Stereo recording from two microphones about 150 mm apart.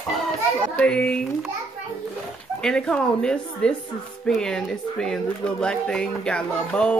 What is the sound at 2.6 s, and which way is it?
Speech, 5° left (ahead or behind).